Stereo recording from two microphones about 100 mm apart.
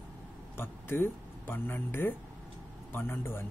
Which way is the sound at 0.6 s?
20° left (ahead or behind).